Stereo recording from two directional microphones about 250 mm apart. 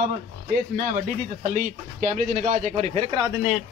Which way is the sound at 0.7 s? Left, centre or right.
Right.